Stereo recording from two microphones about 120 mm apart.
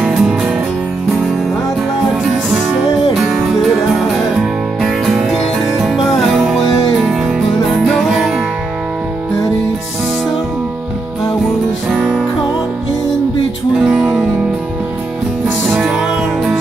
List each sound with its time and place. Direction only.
0.0 s music: 5° right (ahead or behind)
3.2 s music: 5° right (ahead or behind)
13.8 s music: 5° right (ahead or behind)
15.7 s music: 5° right (ahead or behind)